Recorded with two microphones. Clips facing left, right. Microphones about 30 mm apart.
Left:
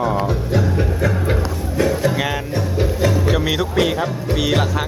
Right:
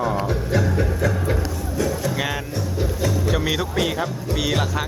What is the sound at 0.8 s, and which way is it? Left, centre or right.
Music, left.